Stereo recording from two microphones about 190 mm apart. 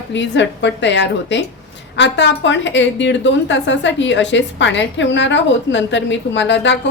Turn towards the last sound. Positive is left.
turn(degrees=70)  # may be behind; listen again after turning